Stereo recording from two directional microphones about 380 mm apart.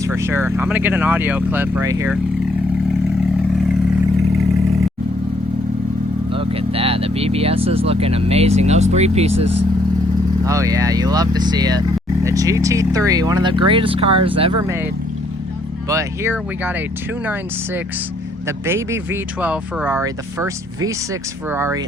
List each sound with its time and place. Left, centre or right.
0.0 s speech: centre
6.3 s speech: centre
10.4 s speech: centre
15.9 s speech: centre
18.4 s speech: centre